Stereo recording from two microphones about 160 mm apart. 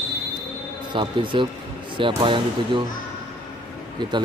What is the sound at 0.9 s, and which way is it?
A man's voice, 30° right (ahead or behind).